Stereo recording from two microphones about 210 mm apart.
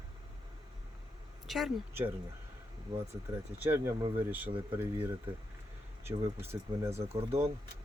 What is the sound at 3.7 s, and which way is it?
Speech, 10° right (ahead or behind).